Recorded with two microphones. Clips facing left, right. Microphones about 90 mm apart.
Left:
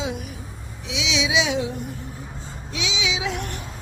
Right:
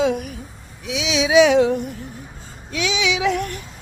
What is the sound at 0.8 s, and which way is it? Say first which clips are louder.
Speech: right 4 dB; 45° right (ahead or behind).